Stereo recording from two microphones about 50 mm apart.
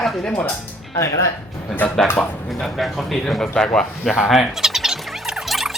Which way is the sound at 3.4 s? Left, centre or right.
Centre.